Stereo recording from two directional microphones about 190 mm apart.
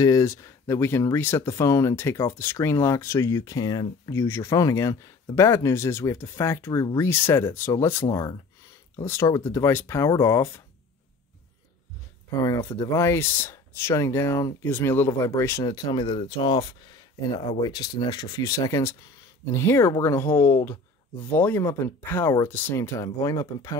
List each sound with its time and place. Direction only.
0.0 s speech: 15° left (ahead or behind)
12.3 s speech: 15° left (ahead or behind)